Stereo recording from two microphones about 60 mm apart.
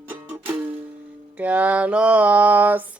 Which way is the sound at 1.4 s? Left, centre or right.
Right.